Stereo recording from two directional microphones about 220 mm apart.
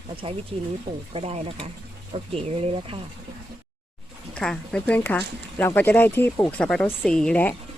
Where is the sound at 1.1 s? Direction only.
25° right (ahead or behind).